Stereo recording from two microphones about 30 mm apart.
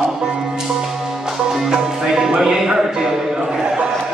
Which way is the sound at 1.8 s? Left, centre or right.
Centre.